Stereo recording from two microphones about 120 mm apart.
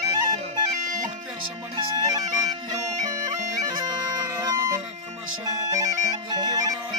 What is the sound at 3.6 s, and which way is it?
Bagpipes, 35° right (ahead or behind).